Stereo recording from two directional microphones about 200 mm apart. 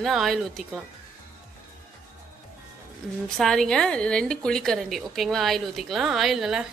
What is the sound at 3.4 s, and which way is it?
A woman's voice, centre (ahead or behind).